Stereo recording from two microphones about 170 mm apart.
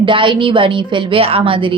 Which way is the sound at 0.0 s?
30° right (ahead or behind).